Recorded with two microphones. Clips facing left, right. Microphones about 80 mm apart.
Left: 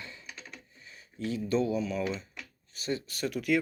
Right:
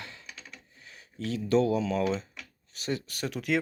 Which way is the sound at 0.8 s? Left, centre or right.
Right.